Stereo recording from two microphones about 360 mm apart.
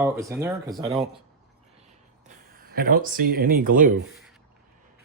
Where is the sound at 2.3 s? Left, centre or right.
Right.